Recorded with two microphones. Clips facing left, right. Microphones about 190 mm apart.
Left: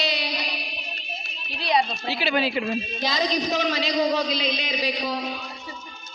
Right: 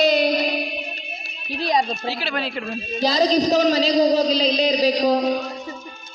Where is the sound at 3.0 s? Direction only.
35° right (ahead or behind).